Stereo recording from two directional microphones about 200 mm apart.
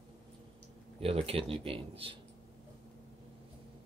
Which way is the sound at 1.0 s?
30° right (ahead or behind).